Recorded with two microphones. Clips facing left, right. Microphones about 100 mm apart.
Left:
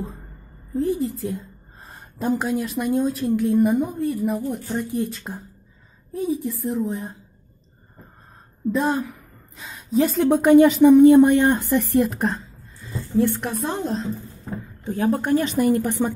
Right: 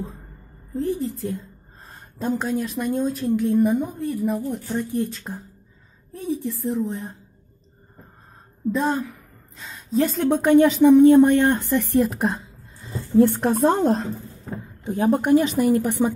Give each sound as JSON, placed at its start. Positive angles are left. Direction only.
{"t": 0.7, "sound": "a woman's voice", "side_deg": 5}
{"t": 8.7, "sound": "a woman's voice", "side_deg": 5}
{"t": 12.8, "sound": "speech", "side_deg": -30}
{"t": 14.9, "sound": "a woman's voice", "side_deg": -20}
{"t": 15.3, "sound": "a woman's voice", "side_deg": -5}